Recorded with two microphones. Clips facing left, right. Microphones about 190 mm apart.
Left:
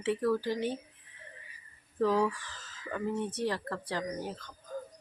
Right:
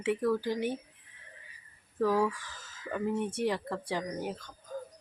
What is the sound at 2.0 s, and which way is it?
Speech, 10° right (ahead or behind).